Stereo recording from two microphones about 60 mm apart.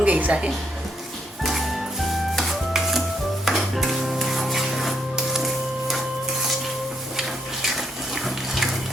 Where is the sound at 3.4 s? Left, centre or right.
Centre.